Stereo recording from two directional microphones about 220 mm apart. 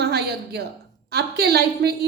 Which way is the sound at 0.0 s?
45° right (ahead or behind).